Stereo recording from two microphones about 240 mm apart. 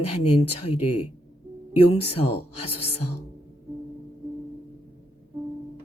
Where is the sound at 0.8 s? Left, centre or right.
Left.